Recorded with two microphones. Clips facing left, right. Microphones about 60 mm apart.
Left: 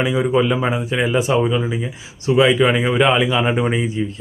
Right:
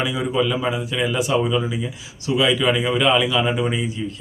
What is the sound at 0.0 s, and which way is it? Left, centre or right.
A man's voice, left.